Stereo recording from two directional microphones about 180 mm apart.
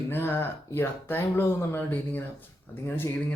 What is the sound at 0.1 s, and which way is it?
Speech, 10° left (ahead or behind).